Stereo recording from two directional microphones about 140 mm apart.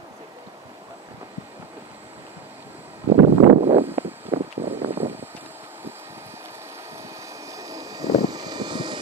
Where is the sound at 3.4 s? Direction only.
50° right (ahead or behind).